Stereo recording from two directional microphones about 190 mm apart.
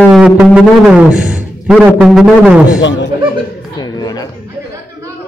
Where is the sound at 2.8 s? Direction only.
70° left (ahead or behind).